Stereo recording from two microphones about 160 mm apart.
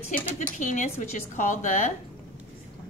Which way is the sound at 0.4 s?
50° left (ahead or behind).